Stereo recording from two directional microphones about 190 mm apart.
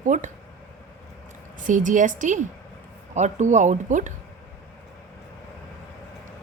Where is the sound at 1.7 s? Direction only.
40° right (ahead or behind).